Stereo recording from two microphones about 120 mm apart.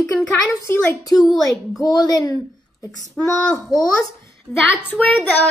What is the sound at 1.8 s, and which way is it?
A child's voice, 30° left (ahead or behind).